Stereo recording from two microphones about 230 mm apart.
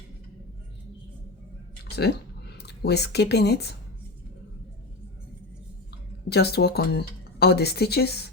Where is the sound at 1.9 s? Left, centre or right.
Left.